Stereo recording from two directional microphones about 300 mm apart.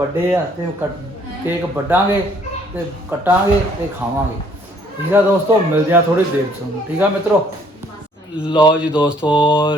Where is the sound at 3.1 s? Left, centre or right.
Centre.